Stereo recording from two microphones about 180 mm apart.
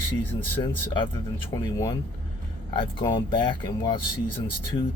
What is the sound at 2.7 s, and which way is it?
Speech, 25° left (ahead or behind).